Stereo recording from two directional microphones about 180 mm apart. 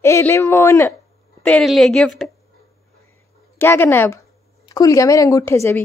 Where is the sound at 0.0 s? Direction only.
15° left (ahead or behind).